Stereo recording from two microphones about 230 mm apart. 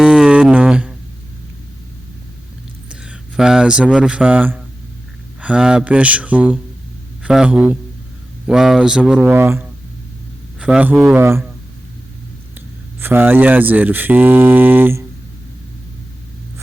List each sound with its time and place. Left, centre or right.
0.0 s music: centre
2.9 s speech: centre
13.0 s speech: centre